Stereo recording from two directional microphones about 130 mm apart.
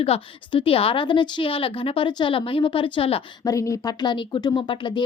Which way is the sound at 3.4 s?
25° left (ahead or behind).